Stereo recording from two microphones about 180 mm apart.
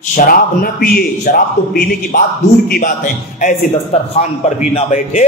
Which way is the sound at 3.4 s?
40° left (ahead or behind).